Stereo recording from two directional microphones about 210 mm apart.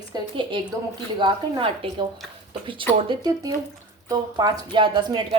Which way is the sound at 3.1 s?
20° right (ahead or behind).